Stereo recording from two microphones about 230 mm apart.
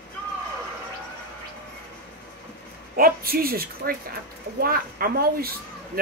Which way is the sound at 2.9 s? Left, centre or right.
Right.